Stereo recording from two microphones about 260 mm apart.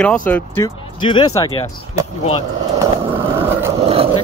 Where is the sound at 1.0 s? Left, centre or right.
Centre.